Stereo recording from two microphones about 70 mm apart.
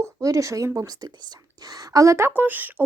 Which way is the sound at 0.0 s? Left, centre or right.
Right.